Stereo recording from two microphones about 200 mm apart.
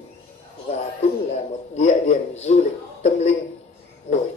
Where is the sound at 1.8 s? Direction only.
35° left (ahead or behind).